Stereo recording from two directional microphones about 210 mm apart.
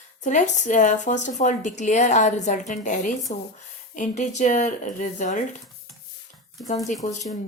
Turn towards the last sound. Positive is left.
turn(degrees=35)  # may be behind; listen again after turning